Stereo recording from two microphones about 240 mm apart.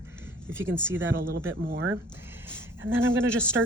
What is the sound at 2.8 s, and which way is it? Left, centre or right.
Speech, centre.